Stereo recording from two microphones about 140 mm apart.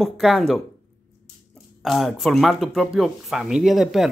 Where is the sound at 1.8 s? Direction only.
Centre (ahead or behind).